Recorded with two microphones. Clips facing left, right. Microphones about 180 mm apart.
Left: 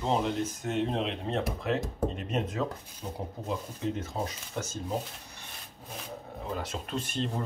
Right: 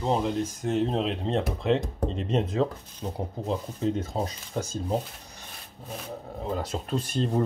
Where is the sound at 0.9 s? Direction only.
30° right (ahead or behind).